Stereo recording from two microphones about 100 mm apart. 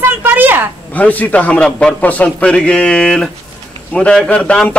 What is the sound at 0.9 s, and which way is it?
A man's voice, 15° left (ahead or behind).